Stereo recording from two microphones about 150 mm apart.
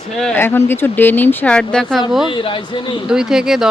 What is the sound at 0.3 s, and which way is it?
Speech, 15° left (ahead or behind).